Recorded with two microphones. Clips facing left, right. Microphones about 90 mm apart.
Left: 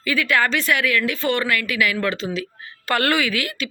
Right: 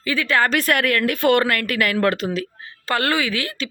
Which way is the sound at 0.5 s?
50° right (ahead or behind).